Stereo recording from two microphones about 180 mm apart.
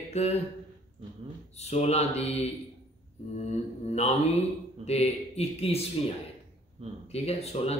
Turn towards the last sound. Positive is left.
turn(degrees=35)  # may be behind; listen again after turning